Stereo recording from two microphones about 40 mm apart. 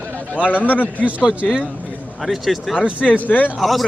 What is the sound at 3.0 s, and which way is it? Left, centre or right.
Speech, left.